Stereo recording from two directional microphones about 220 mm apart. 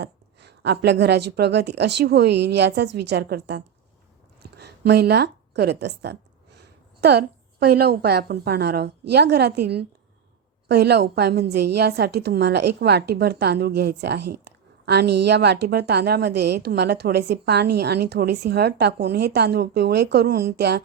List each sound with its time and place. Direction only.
0.0 s a woman's voice: 50° right (ahead or behind)
10.7 s a woman's voice: 50° right (ahead or behind)